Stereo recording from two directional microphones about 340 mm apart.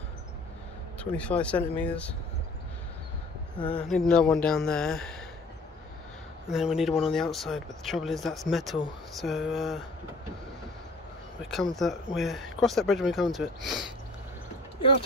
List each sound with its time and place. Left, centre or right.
0.9 s speech: centre
3.5 s speech: centre
6.4 s speech: centre
11.7 s speech: centre